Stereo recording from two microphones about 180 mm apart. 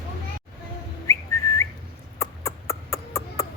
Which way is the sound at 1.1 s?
15° left (ahead or behind).